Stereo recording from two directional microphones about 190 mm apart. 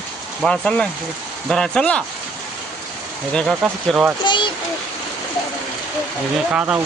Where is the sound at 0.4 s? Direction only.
5° left (ahead or behind).